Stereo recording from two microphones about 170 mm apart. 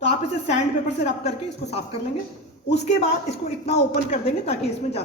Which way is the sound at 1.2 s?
40° left (ahead or behind).